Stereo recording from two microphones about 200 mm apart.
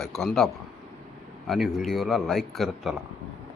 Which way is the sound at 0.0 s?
Centre (ahead or behind).